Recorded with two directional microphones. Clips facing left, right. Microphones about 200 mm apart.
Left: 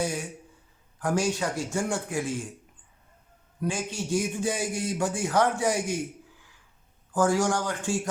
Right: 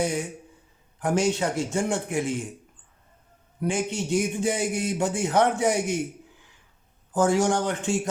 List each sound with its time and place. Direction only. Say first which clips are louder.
0.0 s a man's voice: right 3 dB; 20° right (ahead or behind)
3.6 s a man's voice: right 4 dB; 20° right (ahead or behind)
7.1 s a man's voice: right 2 dB; 25° right (ahead or behind)